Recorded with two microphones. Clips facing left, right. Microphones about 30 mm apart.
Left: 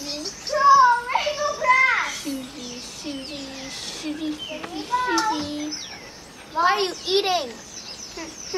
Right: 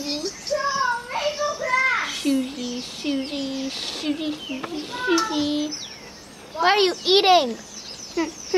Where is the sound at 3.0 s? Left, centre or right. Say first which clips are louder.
Right 7 dB; right.